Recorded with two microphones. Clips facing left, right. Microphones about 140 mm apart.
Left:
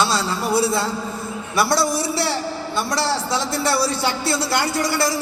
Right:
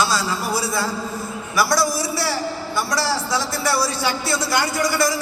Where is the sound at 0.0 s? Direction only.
25° left (ahead or behind).